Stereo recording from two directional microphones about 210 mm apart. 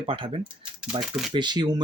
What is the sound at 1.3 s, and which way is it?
Speech, 20° right (ahead or behind).